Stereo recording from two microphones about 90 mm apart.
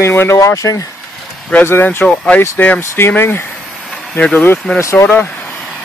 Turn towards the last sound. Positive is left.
turn(degrees=20)  # may be behind; listen again after turning